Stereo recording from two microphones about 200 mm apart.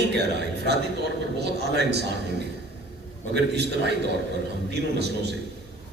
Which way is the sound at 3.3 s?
55° right (ahead or behind).